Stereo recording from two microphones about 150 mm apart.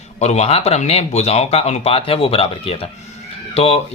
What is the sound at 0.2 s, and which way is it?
Speech, 45° left (ahead or behind).